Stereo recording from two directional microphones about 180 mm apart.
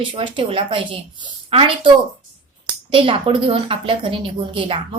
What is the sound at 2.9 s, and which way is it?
A woman's voice, 30° right (ahead or behind).